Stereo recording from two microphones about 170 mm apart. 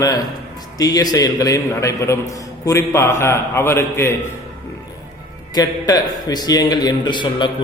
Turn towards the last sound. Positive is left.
turn(degrees=25)  # may be behind; listen again after turning